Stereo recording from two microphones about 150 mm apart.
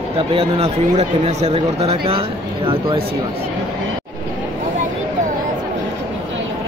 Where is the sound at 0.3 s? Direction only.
40° right (ahead or behind).